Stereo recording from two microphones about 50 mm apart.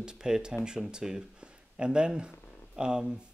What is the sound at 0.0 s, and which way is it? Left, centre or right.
Speech, centre.